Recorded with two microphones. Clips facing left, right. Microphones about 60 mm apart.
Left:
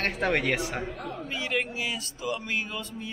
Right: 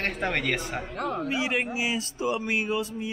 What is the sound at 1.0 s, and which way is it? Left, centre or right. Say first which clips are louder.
Speech: right 7 dB; right.